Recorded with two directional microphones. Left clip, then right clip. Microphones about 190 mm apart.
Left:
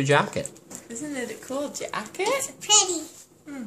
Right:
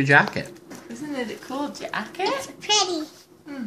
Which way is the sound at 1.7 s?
40° left (ahead or behind).